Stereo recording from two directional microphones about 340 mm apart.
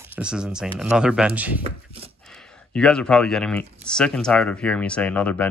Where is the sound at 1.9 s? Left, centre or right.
Centre.